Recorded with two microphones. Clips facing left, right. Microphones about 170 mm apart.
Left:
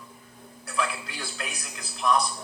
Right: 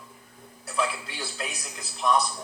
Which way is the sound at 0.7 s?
Centre (ahead or behind).